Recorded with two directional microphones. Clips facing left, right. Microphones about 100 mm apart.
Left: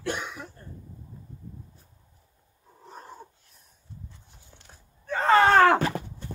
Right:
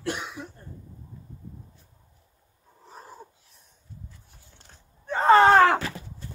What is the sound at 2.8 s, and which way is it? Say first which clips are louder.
Cat: left 1 dB; centre (ahead or behind).